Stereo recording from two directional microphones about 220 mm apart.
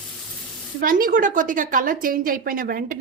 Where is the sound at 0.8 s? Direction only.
40° right (ahead or behind).